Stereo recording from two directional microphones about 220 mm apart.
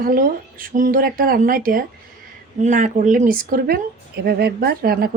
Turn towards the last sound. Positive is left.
turn(degrees=-45)  # may be behind; listen again after turning